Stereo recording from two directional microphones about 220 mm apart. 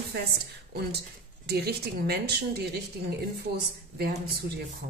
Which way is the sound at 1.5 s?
45° right (ahead or behind).